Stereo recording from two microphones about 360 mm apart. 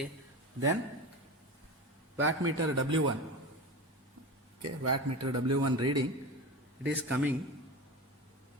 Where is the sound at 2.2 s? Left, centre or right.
Right.